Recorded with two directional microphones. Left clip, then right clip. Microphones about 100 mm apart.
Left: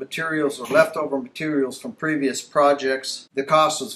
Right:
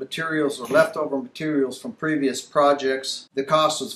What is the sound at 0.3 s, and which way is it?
Speech, 5° right (ahead or behind).